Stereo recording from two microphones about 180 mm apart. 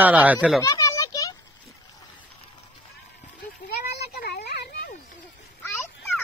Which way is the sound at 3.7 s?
60° left (ahead or behind).